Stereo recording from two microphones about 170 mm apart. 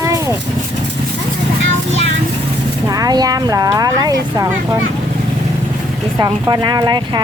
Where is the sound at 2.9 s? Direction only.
20° right (ahead or behind).